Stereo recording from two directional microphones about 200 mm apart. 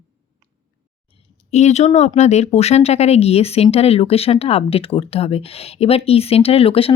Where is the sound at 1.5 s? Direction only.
35° left (ahead or behind).